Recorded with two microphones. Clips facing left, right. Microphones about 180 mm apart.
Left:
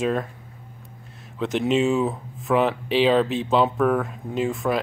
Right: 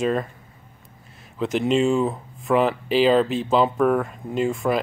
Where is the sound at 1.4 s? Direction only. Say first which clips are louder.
Right 1 dB; centre (ahead or behind).